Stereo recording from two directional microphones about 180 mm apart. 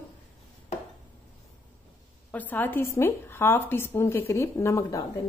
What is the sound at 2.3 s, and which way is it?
A woman's voice, 10° left (ahead or behind).